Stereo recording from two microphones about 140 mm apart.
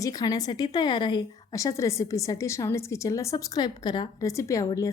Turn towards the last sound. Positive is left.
turn(degrees=25)  # may be behind; listen again after turning